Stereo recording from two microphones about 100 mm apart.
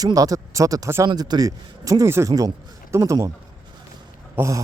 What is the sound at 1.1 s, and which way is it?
Speech, 45° right (ahead or behind).